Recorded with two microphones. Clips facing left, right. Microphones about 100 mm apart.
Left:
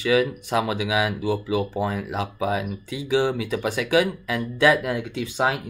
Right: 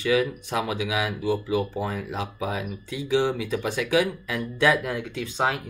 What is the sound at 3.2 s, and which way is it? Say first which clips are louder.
Speech: left 3 dB; 65° left (ahead or behind).